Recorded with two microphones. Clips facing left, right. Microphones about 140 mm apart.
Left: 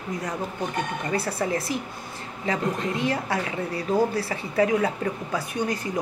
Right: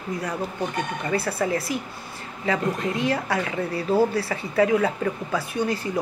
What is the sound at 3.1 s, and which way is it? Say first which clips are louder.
A woman's voice: right 2 dB; 25° left (ahead or behind).